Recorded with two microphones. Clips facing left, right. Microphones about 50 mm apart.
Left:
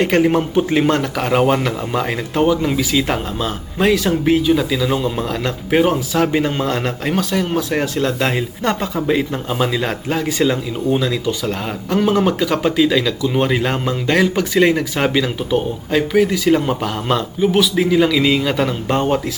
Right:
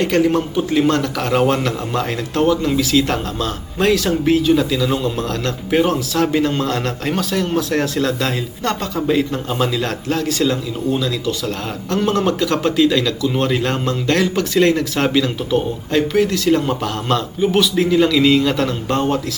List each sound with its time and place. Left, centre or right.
0.0 s speech: centre
8.0 s speech: left